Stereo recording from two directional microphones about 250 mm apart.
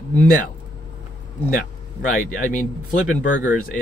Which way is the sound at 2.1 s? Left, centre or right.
Left.